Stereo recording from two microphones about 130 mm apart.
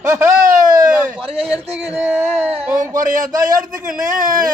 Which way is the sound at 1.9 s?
15° right (ahead or behind).